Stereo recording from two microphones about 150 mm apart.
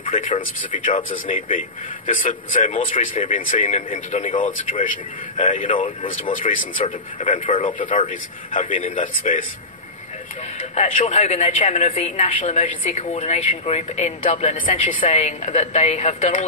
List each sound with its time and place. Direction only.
0.0 s speech: 60° left (ahead or behind)
6.5 s a woman's voice: 50° left (ahead or behind)
7.2 s speech: 60° left (ahead or behind)
10.7 s a woman's voice: 50° left (ahead or behind)